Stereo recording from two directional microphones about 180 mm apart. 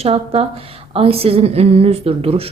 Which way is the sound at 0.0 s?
35° right (ahead or behind).